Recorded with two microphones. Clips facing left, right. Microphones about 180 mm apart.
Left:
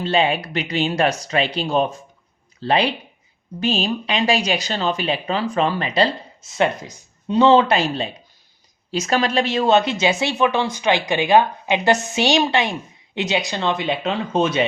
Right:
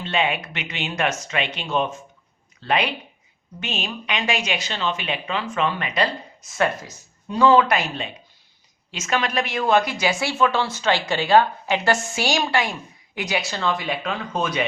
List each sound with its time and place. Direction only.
0.0 s speech: 35° left (ahead or behind)